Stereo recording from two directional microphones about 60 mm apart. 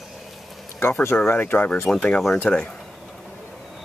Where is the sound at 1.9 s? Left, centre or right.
Centre.